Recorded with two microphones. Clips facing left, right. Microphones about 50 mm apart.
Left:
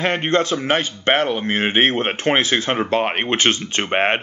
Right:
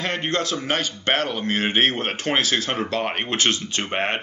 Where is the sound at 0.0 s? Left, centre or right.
Left.